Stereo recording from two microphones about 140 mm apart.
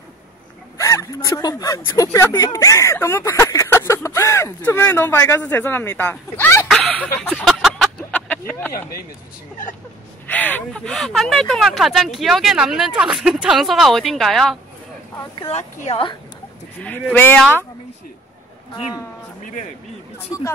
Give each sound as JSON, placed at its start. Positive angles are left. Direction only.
{"t": 0.7, "sound": "speech", "side_deg": 20}
{"t": 6.7, "sound": "a sound", "side_deg": 5}
{"t": 10.2, "sound": "speech", "side_deg": 10}
{"t": 15.3, "sound": "speech", "side_deg": 40}
{"t": 16.8, "sound": "speech", "side_deg": 15}
{"t": 20.2, "sound": "speech", "side_deg": 20}